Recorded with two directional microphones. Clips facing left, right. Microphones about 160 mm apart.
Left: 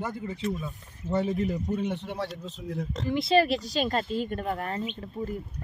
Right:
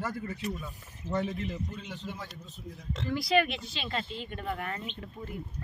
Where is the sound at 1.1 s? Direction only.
30° left (ahead or behind).